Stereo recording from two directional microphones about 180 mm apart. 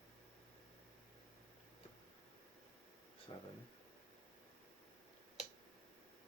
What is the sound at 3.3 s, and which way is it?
Speech, 25° left (ahead or behind).